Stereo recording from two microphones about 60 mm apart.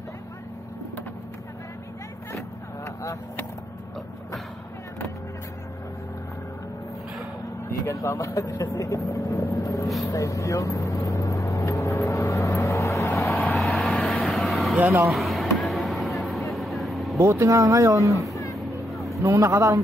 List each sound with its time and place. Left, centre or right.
2.3 s vehicle: left
7.8 s speech: left
9.1 s vehicle: left
13.6 s vehicle: centre
15.0 s a sound: centre
15.5 s vehicle: centre
17.2 s speech: right
18.3 s music: left
18.9 s vehicle: centre
19.2 s speech: right